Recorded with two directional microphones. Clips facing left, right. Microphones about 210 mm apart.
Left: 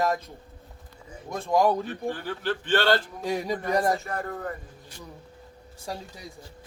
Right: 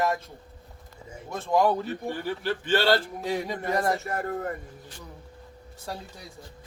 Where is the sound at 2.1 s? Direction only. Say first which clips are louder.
Right 3 dB; 10° right (ahead or behind).